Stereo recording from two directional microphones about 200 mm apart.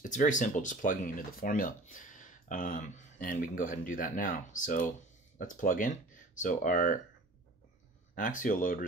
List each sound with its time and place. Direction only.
0.0 s speech: 40° left (ahead or behind)
8.1 s speech: 40° left (ahead or behind)